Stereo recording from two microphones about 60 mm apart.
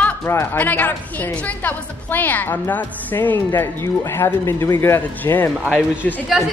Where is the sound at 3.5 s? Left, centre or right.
Left.